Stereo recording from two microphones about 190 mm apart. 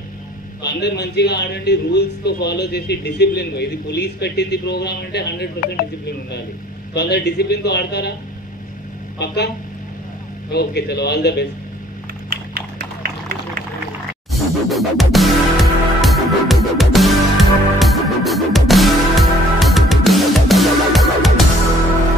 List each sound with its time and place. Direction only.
0.6 s a man's voice: 60° left (ahead or behind)
9.2 s a man's voice: 60° left (ahead or behind)
10.5 s a man's voice: 60° left (ahead or behind)
14.3 s music: centre (ahead or behind)